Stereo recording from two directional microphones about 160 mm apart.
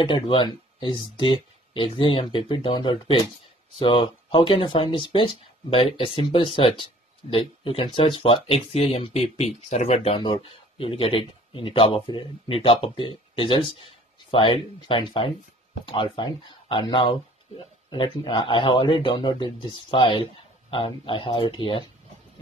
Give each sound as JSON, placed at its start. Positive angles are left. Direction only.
{"t": 0.0, "sound": "speech", "side_deg": 30}